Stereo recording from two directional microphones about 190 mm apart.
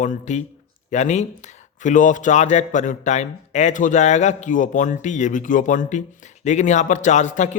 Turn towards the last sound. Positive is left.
turn(degrees=40)  # may be behind; listen again after turning